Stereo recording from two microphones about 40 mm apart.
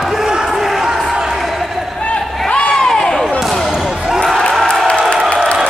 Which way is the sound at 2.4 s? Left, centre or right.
Left.